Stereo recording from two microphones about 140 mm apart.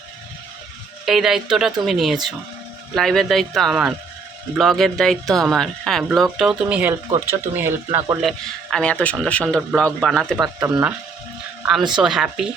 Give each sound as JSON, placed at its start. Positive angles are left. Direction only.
{"t": 1.0, "sound": "speech", "side_deg": 0}
{"t": 8.2, "sound": "speech", "side_deg": 5}
{"t": 10.4, "sound": "speech", "side_deg": -25}
{"t": 11.9, "sound": "speech", "side_deg": -5}